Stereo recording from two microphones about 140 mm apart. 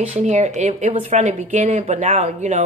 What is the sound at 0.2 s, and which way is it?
Speech, 55° right (ahead or behind).